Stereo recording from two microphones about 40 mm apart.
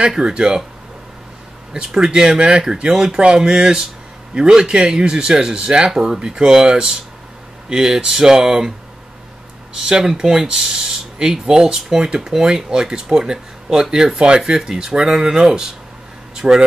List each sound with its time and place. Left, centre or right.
0.0 s speech: centre
1.7 s speech: centre
9.8 s speech: centre